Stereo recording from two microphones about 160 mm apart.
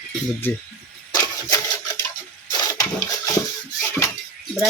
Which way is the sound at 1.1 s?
20° left (ahead or behind).